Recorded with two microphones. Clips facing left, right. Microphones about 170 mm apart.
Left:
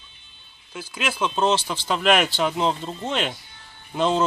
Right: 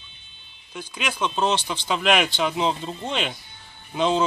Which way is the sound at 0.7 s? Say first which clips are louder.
Left 2 dB; 5° left (ahead or behind).